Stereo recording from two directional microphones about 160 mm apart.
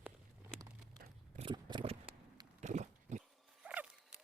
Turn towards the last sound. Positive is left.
turn(degrees=-10)  # may be behind; listen again after turning